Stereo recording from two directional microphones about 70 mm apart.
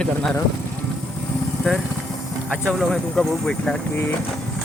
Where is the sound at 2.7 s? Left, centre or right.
Centre.